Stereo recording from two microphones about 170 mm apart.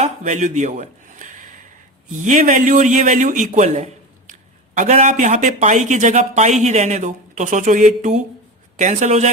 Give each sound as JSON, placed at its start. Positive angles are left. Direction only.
{"t": 0.0, "sound": "speech", "side_deg": -45}